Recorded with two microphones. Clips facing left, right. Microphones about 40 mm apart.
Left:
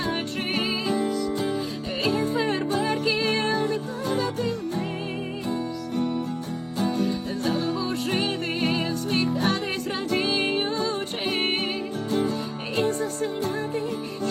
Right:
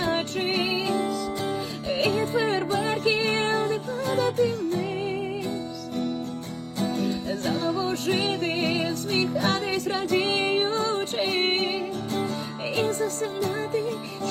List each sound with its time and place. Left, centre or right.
0.0 s music: right
2.4 s music: centre
2.6 s music: right
6.9 s music: right
12.7 s music: right